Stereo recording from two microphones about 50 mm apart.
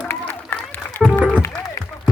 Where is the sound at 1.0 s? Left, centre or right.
Centre.